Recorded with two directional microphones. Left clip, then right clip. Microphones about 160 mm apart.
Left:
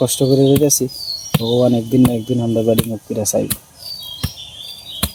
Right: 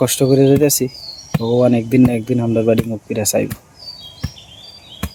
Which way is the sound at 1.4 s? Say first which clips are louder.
Right 1 dB; 15° right (ahead or behind).